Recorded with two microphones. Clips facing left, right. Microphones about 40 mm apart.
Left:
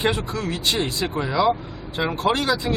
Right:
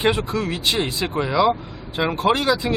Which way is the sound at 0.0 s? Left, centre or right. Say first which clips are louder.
Right 3 dB; centre.